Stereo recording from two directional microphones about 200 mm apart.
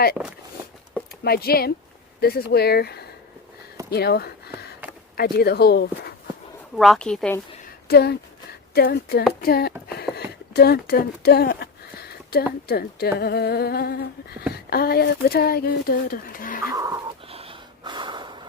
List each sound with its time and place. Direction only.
1.2 s speech: 50° left (ahead or behind)
6.7 s speech: centre (ahead or behind)
7.9 s speech: 55° left (ahead or behind)
9.4 s a sound: 50° left (ahead or behind)
12.6 s speech: 50° left (ahead or behind)
16.7 s goat: 15° right (ahead or behind)
17.2 s snort: 30° right (ahead or behind)